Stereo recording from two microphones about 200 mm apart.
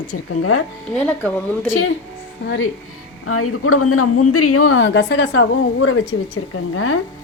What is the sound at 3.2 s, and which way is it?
Speech, 90° left.